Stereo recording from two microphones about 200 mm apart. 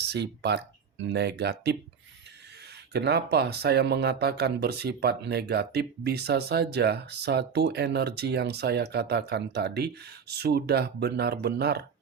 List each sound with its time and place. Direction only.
0.0 s speech: 55° right (ahead or behind)
2.9 s speech: 55° right (ahead or behind)